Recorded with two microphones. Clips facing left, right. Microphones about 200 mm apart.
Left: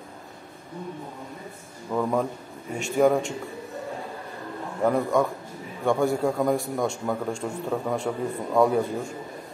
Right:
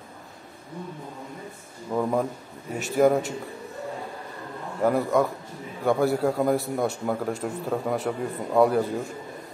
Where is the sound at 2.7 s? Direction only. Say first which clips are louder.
Even; 5° right (ahead or behind).